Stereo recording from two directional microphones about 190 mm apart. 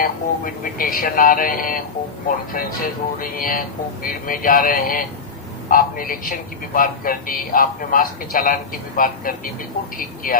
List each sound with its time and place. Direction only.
0.0 s a man's voice: 45° left (ahead or behind)